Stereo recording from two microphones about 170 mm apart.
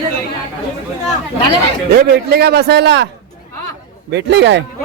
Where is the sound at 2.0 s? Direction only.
70° right (ahead or behind); by 3.1 s 90° right.